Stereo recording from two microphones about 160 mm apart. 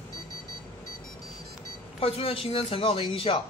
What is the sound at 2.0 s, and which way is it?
A man's voice, 35° left (ahead or behind).